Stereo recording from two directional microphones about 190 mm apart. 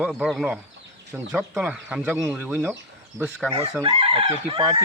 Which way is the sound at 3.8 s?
30° right (ahead or behind).